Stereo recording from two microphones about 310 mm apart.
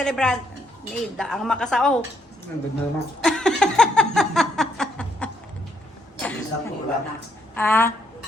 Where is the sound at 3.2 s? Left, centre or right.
Centre.